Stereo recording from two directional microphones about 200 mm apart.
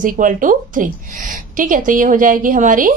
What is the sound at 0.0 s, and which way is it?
A woman's voice, 40° right (ahead or behind).